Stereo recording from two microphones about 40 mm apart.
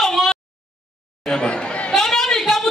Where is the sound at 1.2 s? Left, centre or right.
Left.